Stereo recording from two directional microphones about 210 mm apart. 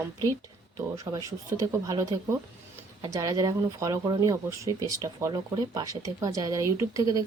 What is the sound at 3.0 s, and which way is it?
Speech, 15° right (ahead or behind).